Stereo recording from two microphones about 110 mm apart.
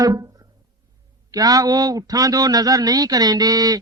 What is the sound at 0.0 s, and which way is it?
Music, 35° right (ahead or behind).